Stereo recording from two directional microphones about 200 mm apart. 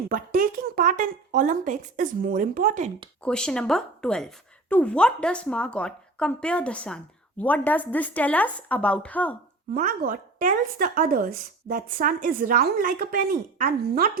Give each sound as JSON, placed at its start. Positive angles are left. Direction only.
{"t": 0.1, "sound": "speech", "side_deg": -45}
{"t": 3.2, "sound": "a woman's voice", "side_deg": 5}
{"t": 9.7, "sound": "speech", "side_deg": -45}